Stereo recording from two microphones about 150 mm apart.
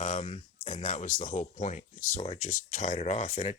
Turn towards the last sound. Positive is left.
turn(degrees=50)  # may be behind; listen again after turning